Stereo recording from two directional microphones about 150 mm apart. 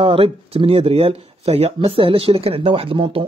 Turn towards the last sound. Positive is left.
turn(degrees=-35)  # may be behind; listen again after turning